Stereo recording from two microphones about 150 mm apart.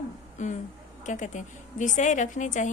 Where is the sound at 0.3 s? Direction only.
55° left (ahead or behind).